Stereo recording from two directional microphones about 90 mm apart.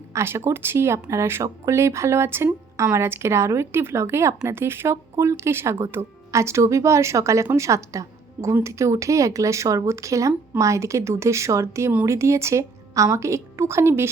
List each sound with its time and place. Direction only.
0.1 s a woman's voice: 30° right (ahead or behind)